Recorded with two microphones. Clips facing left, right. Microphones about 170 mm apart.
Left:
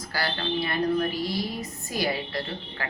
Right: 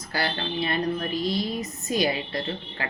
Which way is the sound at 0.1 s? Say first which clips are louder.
Even; 25° right (ahead or behind).